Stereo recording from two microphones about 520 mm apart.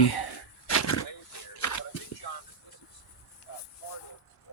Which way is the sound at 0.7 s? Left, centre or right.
Left.